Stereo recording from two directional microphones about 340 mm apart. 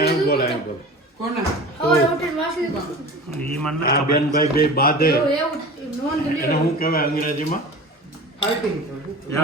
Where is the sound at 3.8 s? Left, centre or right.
Left.